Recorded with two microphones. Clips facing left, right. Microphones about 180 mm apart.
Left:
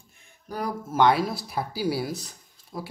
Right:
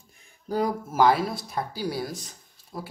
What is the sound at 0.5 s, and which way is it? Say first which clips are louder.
Speech: right 5 dB; 20° right (ahead or behind).